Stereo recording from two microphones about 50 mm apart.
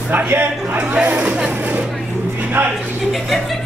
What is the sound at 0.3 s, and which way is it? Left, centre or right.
Speech, right.